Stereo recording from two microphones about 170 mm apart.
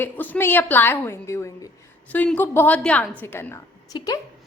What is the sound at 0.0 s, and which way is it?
A woman's voice, 10° left (ahead or behind).